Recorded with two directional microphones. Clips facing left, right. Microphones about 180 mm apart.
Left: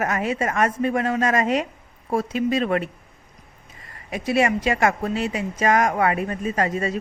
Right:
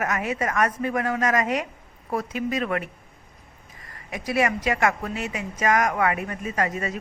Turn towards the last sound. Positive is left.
turn(degrees=30)  # may be behind; listen again after turning